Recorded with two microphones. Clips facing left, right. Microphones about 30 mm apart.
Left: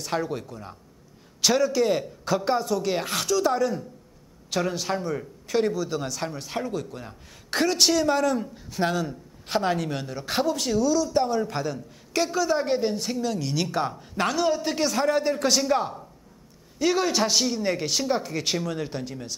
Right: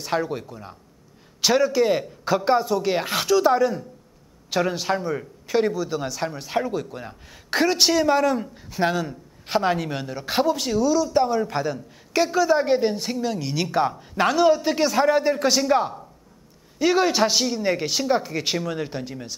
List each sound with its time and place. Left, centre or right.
0.0 s a man's voice: centre